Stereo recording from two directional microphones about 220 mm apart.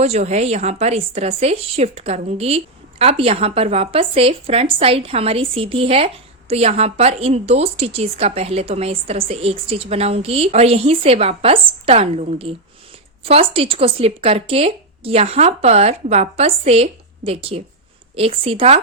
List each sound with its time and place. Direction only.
0.0 s a woman's voice: 30° right (ahead or behind)